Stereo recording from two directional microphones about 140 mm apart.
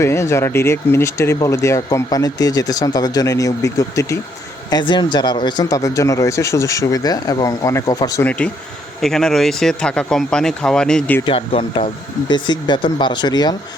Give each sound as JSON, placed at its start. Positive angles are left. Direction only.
{"t": 0.0, "sound": "speech", "side_deg": 20}
{"t": 4.7, "sound": "speech", "side_deg": 35}
{"t": 8.2, "sound": "speech", "side_deg": 10}
{"t": 11.3, "sound": "speech", "side_deg": 40}